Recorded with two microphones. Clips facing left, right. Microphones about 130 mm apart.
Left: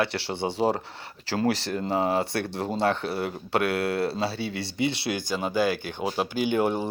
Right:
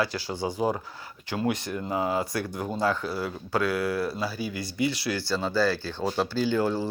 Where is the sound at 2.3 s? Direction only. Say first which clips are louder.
Left 1 dB; 65° left (ahead or behind).